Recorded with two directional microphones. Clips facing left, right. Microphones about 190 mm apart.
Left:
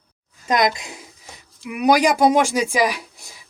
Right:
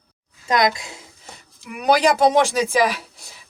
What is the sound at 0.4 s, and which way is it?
A woman's voice, 20° left (ahead or behind).